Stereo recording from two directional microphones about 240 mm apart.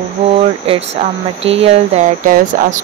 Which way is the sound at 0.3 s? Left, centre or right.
Right.